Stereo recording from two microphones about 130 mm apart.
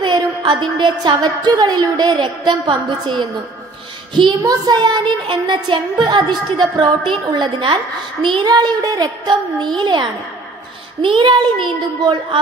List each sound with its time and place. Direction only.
0.0 s a woman's voice: 35° right (ahead or behind)